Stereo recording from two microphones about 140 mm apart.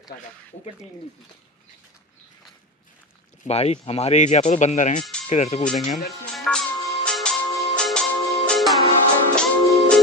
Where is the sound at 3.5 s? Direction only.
50° left (ahead or behind).